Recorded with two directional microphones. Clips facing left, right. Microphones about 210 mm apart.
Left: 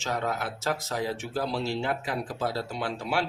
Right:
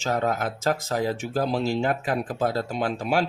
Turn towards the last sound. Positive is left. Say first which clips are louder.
# right 5 dB
turn(degrees=-45)  # may be behind; listen again after turning